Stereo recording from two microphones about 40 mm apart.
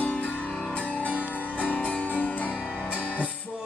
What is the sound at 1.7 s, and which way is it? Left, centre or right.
Music, left.